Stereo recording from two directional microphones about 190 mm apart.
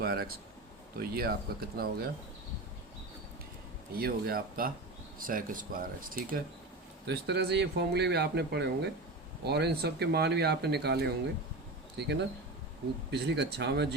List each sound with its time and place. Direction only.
0.0 s speech: 55° right (ahead or behind)
3.9 s speech: 50° right (ahead or behind)
7.1 s speech: 60° right (ahead or behind)